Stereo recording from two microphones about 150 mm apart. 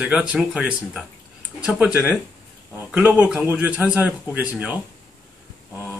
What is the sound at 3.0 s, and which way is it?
Speech, 10° right (ahead or behind).